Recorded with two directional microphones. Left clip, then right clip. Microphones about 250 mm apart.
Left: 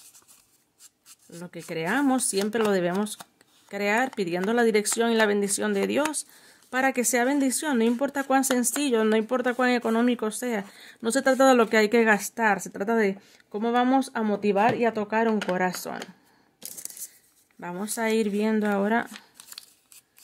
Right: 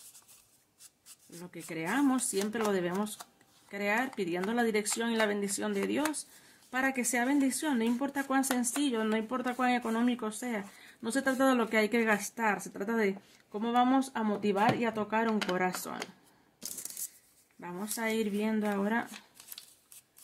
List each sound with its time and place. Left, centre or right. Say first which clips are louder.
1.4 s a woman's voice: left 7 dB; left
17.6 s speech: left 7 dB; left